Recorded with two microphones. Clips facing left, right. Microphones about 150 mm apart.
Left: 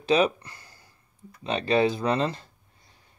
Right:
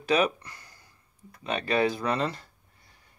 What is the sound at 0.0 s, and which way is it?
Speech, 25° left (ahead or behind).